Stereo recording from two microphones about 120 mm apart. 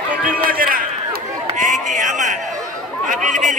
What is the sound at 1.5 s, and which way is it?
Run, 90° right.